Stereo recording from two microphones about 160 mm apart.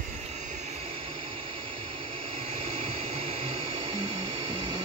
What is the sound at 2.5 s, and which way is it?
Vacuum cleaner, 35° right (ahead or behind).